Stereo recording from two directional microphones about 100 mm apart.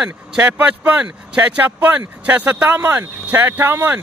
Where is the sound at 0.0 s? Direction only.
15° right (ahead or behind).